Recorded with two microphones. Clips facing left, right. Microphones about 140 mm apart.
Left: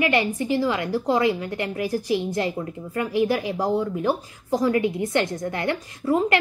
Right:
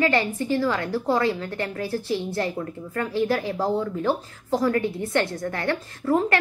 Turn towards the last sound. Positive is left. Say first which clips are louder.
# left 1 dB
turn(degrees=15)  # may be behind; listen again after turning